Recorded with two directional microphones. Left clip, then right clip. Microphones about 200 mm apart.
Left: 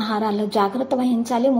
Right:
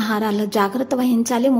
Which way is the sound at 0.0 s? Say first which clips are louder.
Right 1 dB; 25° right (ahead or behind).